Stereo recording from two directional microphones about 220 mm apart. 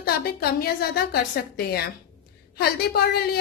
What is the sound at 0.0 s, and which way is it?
A woman's voice, 45° left (ahead or behind).